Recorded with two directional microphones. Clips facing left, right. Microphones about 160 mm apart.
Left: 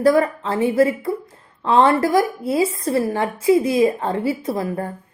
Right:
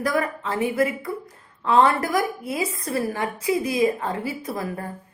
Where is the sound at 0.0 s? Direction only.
30° left (ahead or behind).